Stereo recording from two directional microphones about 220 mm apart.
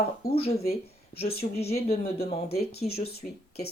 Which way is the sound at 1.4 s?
30° left (ahead or behind).